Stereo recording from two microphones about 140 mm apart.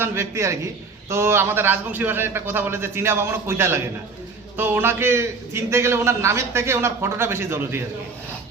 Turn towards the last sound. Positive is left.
turn(degrees=-15)  # may be behind; listen again after turning